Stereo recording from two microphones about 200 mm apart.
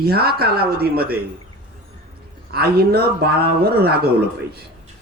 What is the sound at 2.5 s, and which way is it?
Speech, 50° right (ahead or behind).